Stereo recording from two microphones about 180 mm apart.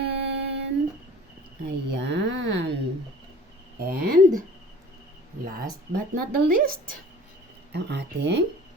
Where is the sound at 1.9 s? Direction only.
70° right (ahead or behind).